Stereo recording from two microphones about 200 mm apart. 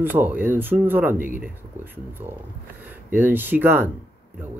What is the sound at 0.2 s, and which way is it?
Speech, 10° right (ahead or behind).